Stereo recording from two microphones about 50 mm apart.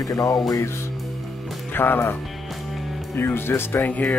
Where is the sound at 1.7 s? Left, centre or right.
Left.